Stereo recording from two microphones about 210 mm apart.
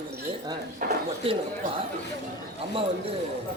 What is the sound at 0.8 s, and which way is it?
Speech, 40° right (ahead or behind).